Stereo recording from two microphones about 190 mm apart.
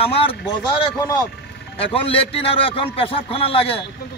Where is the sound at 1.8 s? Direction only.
30° left (ahead or behind).